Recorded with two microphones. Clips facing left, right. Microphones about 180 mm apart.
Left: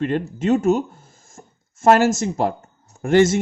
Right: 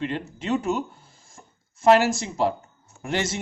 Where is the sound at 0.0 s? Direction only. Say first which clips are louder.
Left 8 dB; 50° left (ahead or behind).